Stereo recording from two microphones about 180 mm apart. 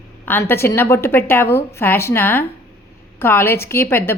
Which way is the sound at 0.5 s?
15° left (ahead or behind).